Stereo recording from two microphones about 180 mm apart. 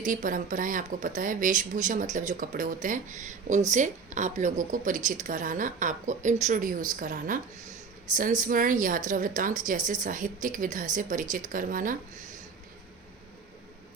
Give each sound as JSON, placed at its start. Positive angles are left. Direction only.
{"t": 0.0, "sound": "speech", "side_deg": -45}